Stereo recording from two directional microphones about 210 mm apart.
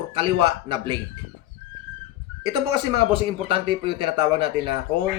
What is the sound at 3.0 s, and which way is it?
A man's voice, 25° right (ahead or behind).